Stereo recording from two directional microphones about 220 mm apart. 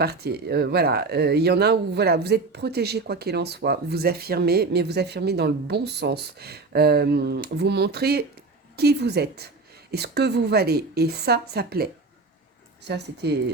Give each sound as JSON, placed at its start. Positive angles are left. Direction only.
{"t": 0.0, "sound": "speech", "side_deg": -45}
{"t": 12.9, "sound": "speech", "side_deg": -50}